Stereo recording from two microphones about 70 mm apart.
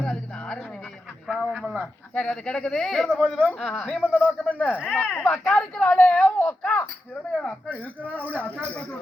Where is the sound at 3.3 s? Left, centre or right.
Centre.